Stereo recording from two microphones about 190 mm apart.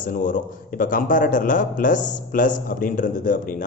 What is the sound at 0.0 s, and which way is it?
Speech, 45° left (ahead or behind).